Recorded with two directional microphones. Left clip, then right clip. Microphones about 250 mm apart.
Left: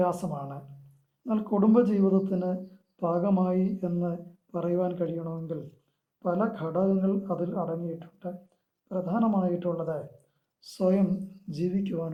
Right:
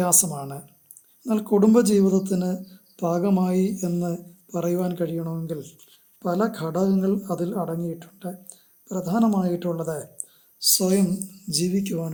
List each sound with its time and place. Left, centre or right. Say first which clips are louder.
0.0 s speech: right 4 dB; right